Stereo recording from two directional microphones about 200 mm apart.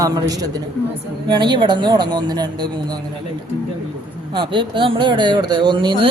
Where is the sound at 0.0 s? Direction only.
20° right (ahead or behind).